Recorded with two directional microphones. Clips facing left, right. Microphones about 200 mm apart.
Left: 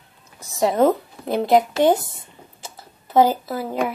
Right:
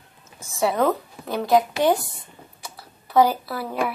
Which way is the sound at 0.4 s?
35° left (ahead or behind).